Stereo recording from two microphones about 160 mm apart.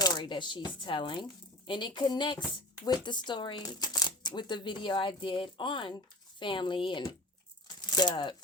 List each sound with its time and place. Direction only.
0.0 s speech: 25° left (ahead or behind)